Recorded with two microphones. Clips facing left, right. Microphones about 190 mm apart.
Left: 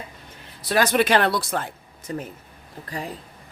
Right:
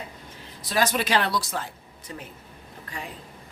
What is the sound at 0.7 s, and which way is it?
Speech, 60° left (ahead or behind).